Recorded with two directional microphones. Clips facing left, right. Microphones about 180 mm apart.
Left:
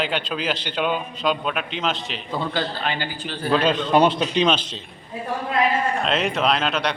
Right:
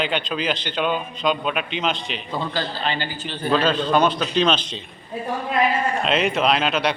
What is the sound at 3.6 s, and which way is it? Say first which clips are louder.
Speech: left 3 dB; 20° left (ahead or behind).